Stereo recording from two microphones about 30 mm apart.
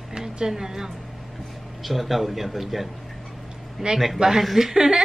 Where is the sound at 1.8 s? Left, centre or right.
Centre.